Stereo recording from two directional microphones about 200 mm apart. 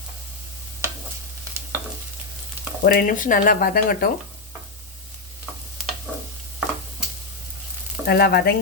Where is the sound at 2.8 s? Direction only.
45° left (ahead or behind).